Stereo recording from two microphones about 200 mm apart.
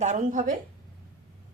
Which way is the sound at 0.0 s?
40° right (ahead or behind).